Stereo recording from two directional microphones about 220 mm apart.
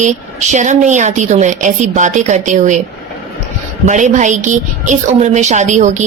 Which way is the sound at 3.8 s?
35° right (ahead or behind).